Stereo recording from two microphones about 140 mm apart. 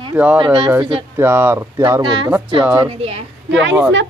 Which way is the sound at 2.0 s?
35° right (ahead or behind).